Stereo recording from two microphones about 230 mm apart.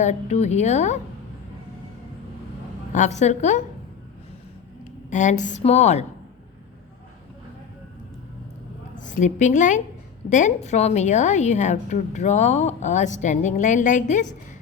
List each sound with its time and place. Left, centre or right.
0.0 s speech: left
2.9 s a woman's voice: left
5.1 s a woman's voice: left
9.0 s a woman's voice: left